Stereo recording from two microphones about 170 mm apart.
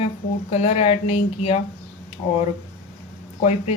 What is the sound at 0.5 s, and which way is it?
Speech, 35° left (ahead or behind).